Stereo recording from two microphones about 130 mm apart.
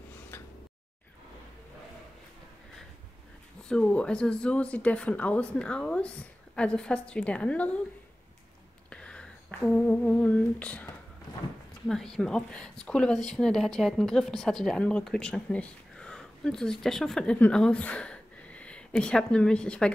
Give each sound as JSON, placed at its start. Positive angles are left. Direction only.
{"t": 0.3, "sound": "tick-tock", "side_deg": 15}
{"t": 3.6, "sound": "speech", "side_deg": 5}
{"t": 8.9, "sound": "speech", "side_deg": 5}
{"t": 11.9, "sound": "a woman's voice", "side_deg": 5}